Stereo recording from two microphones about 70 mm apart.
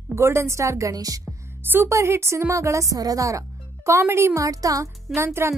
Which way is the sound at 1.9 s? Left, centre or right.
Right.